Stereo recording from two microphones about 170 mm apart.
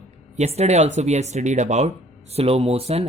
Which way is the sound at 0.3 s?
40° right (ahead or behind).